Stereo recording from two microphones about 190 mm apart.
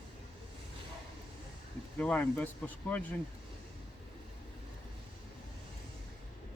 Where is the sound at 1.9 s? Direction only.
10° left (ahead or behind).